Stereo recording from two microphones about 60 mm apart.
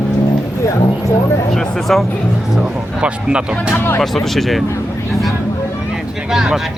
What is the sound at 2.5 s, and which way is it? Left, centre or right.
Speech, centre.